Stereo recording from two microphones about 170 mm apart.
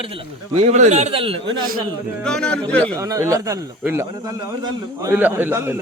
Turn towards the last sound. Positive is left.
turn(degrees=-15)  # may be behind; listen again after turning